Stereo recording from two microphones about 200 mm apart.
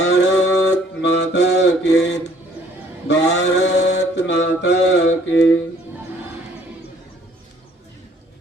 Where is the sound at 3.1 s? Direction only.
60° left (ahead or behind).